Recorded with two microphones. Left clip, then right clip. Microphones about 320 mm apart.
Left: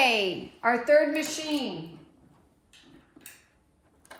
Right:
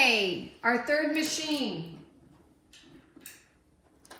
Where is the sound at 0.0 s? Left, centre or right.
Centre.